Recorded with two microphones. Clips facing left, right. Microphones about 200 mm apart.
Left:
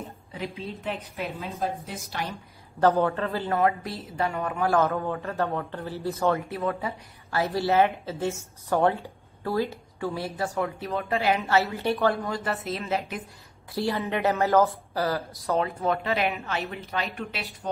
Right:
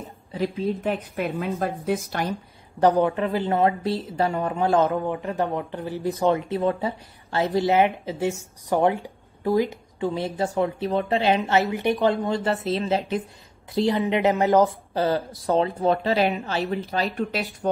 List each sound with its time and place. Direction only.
0.6 s a woman's voice: 50° right (ahead or behind)
2.8 s a woman's voice: 15° right (ahead or behind)
6.6 s a woman's voice: 30° right (ahead or behind)